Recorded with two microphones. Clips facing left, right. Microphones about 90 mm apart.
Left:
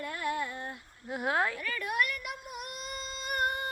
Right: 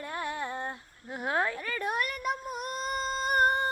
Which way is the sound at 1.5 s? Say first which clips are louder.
Right 1 dB; 30° right (ahead or behind).